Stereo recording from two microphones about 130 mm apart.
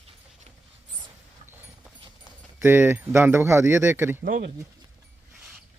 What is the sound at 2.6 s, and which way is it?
Speech, 15° right (ahead or behind).